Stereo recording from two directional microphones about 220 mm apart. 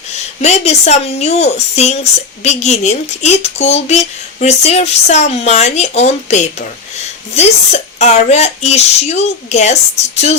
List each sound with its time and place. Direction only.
0.1 s speech: 30° left (ahead or behind)